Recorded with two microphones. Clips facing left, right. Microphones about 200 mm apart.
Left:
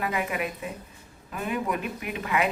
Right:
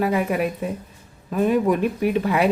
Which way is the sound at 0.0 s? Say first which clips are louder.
Right 8 dB; 40° right (ahead or behind).